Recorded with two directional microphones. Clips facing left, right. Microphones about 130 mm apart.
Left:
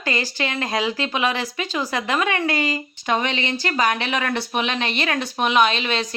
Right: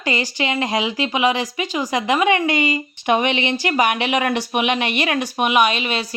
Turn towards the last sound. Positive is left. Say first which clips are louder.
# right 1 dB
turn(degrees=-10)  # may be behind; listen again after turning